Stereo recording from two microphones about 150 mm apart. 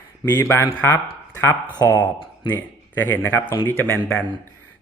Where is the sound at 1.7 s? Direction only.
25° left (ahead or behind).